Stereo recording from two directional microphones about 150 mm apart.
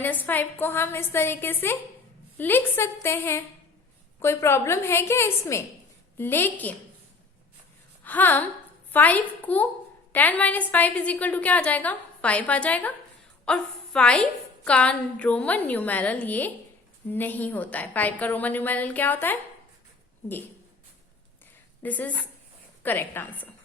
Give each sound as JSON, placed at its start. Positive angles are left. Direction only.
{"t": 0.0, "sound": "a woman's voice", "side_deg": 10}
{"t": 8.0, "sound": "a woman's voice", "side_deg": 10}
{"t": 21.8, "sound": "a woman's voice", "side_deg": 10}